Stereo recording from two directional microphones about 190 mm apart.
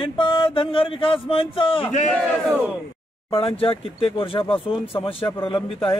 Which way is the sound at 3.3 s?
30° left (ahead or behind).